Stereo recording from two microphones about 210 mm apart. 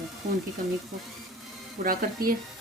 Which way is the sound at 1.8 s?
45° right (ahead or behind).